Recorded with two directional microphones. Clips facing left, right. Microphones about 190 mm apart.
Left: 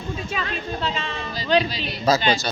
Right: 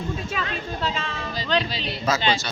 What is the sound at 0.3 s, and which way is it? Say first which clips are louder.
Speech: left 1 dB; centre (ahead or behind).